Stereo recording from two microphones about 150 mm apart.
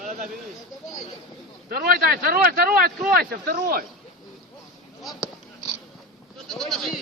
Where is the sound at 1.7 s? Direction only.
85° right.